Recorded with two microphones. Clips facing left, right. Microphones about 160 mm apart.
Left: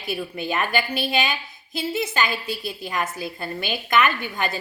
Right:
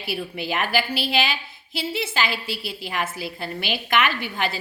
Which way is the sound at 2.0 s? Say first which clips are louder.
Left 1 dB; 5° right (ahead or behind).